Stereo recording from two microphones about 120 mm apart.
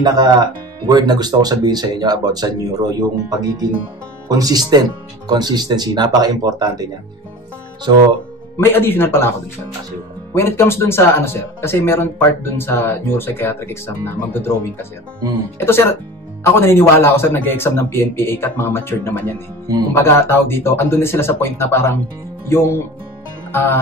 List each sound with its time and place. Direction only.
0.0 s speech: 35° right (ahead or behind)
8.5 s speech: 20° left (ahead or behind)
10.3 s speech: 20° left (ahead or behind)
23.5 s music: 15° left (ahead or behind)